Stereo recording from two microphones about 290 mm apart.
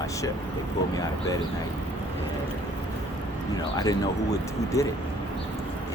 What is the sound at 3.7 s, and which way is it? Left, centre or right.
Speech, centre.